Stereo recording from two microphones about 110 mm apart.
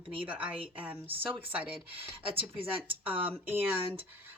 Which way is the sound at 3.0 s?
15° right (ahead or behind).